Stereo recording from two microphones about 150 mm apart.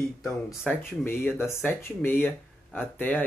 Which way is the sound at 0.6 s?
10° left (ahead or behind).